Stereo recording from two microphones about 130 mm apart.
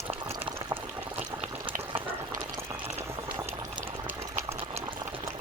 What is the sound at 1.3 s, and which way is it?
Frying, 40° right (ahead or behind).